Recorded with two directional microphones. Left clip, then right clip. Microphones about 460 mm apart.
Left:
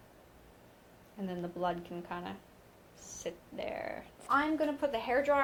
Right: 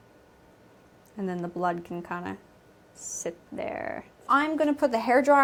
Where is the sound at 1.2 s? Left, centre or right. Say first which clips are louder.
Right 7 dB; right.